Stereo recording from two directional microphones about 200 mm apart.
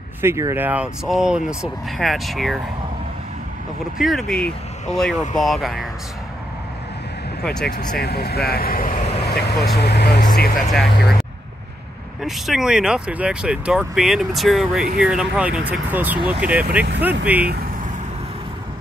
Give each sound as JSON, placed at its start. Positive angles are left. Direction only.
{"t": 0.2, "sound": "speech", "side_deg": -15}
{"t": 4.0, "sound": "speech", "side_deg": 0}
{"t": 5.1, "sound": "speech", "side_deg": 40}
{"t": 5.4, "sound": "speech", "side_deg": 0}
{"t": 8.0, "sound": "speech", "side_deg": 50}
{"t": 9.2, "sound": "speech", "side_deg": 55}
{"t": 10.7, "sound": "speech", "side_deg": 0}
{"t": 12.2, "sound": "speech", "side_deg": 0}